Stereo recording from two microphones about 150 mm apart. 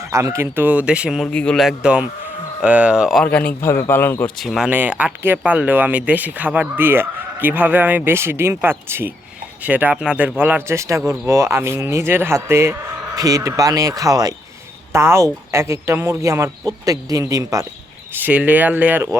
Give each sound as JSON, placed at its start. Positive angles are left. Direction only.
{"t": 0.0, "sound": "speech", "side_deg": -20}
{"t": 1.3, "sound": "speech", "side_deg": 5}
{"t": 3.2, "sound": "a man's voice", "side_deg": 10}
{"t": 4.4, "sound": "speech", "side_deg": 0}
{"t": 18.2, "sound": "speech", "side_deg": -10}